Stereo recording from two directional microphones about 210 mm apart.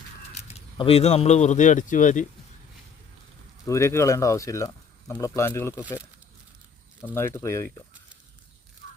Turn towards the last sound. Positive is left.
turn(degrees=10)  # may be behind; listen again after turning